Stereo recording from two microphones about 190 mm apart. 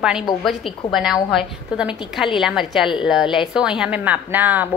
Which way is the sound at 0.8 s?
25° left (ahead or behind).